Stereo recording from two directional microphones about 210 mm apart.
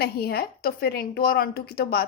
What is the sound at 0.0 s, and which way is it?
A woman's voice, 50° left (ahead or behind).